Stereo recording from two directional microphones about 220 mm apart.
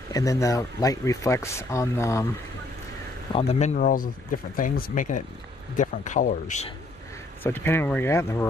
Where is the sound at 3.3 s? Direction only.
25° left (ahead or behind).